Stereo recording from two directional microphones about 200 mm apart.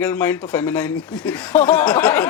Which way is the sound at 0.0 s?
5° left (ahead or behind).